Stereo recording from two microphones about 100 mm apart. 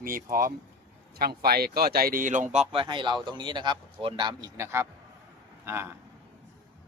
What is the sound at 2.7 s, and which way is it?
A man's voice, 55° right (ahead or behind).